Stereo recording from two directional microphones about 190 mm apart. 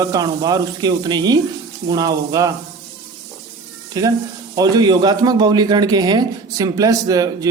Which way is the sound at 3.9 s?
20° right (ahead or behind).